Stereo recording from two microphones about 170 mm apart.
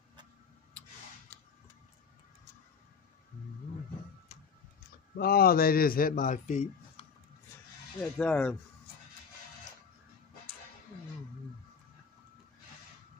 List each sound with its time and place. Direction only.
5.1 s a man's voice: 65° left (ahead or behind); by 6.7 s 45° left (ahead or behind)
8.0 s speech: 5° left (ahead or behind)